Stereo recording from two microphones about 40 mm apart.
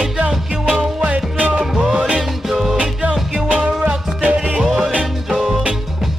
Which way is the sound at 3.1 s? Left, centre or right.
Centre.